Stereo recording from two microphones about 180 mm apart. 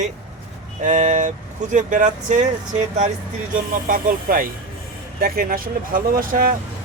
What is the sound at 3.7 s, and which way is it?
Speech, 50° right (ahead or behind).